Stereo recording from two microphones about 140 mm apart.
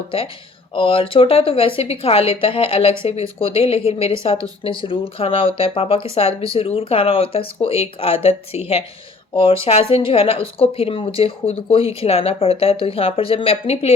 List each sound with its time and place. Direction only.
0.7 s a woman's voice: 40° left (ahead or behind)